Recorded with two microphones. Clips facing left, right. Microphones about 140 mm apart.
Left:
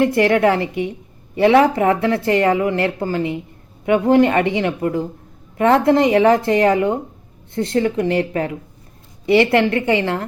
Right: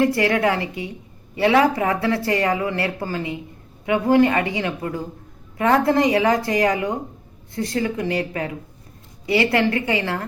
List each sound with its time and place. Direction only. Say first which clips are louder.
0.0 s speech: left 4 dB; 25° left (ahead or behind)